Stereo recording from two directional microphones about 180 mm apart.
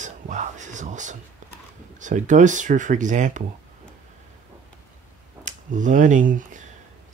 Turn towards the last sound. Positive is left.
turn(degrees=-45)  # may be behind; listen again after turning